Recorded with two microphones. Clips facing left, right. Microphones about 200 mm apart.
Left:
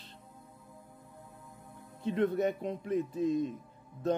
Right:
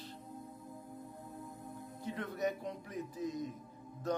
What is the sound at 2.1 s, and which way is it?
Speech, 25° left (ahead or behind).